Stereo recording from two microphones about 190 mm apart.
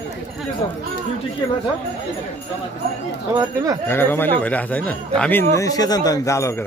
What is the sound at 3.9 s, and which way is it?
Speech, 10° left (ahead or behind).